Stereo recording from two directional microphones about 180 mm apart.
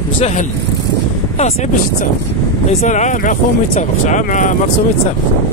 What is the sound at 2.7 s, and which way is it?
Speech, 40° left (ahead or behind).